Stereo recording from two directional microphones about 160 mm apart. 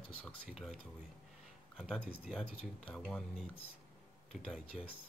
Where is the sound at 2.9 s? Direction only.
Centre (ahead or behind).